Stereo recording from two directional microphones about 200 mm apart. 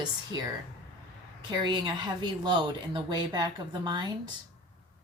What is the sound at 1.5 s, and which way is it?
Speech, 20° right (ahead or behind).